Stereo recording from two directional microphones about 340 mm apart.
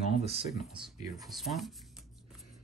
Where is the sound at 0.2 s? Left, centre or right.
Centre.